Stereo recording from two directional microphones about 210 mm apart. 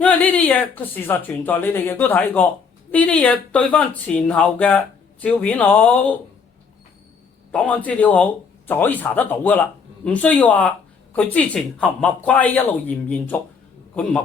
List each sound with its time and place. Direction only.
0.0 s speech: 5° left (ahead or behind)
7.5 s a man's voice: 5° left (ahead or behind)